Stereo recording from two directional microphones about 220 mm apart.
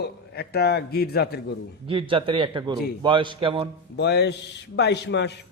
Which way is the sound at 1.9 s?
25° right (ahead or behind).